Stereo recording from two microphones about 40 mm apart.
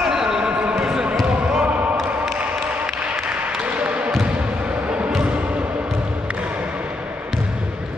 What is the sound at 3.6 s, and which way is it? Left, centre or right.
Basketball bounce, right.